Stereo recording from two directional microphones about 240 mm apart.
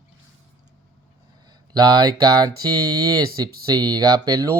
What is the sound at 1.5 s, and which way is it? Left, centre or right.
Speech, centre.